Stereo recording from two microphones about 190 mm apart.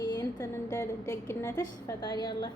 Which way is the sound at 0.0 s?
20° left (ahead or behind).